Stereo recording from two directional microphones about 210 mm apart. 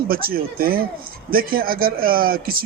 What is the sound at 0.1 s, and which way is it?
Speech, 45° right (ahead or behind).